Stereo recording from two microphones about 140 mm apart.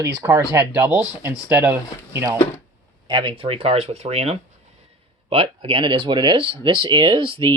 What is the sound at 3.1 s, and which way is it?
Speech, 35° right (ahead or behind).